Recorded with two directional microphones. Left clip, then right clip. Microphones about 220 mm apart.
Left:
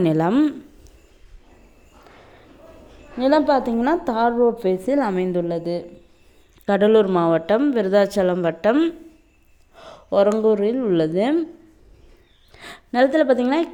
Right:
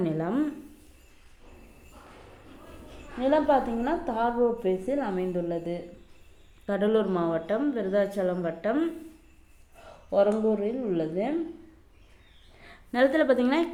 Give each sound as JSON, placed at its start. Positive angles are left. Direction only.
{"t": 0.0, "sound": "speech", "side_deg": 45}
{"t": 3.2, "sound": "a woman's voice", "side_deg": 40}
{"t": 12.5, "sound": "a sound", "side_deg": 50}
{"t": 12.9, "sound": "a woman's voice", "side_deg": 30}